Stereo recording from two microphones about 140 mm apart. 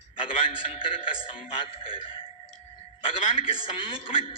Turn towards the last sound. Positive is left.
turn(degrees=40)  # may be behind; listen again after turning